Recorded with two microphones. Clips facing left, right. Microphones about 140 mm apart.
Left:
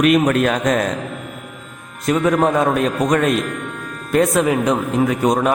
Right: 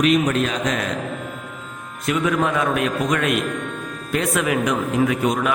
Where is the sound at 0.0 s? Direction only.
55° left (ahead or behind).